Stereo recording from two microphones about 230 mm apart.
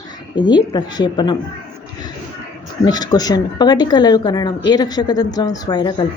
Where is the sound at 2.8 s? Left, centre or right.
Centre.